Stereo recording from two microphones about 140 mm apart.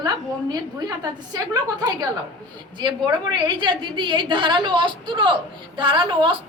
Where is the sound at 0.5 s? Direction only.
25° right (ahead or behind).